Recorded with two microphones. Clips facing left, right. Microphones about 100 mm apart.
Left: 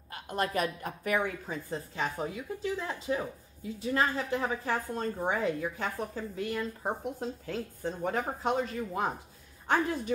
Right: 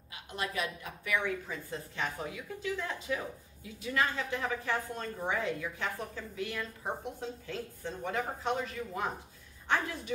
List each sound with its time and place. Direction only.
0.1 s a woman's voice: 45° left (ahead or behind)